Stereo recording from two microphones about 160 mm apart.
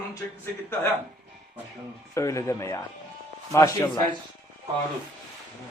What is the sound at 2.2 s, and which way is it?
Speech, 20° left (ahead or behind).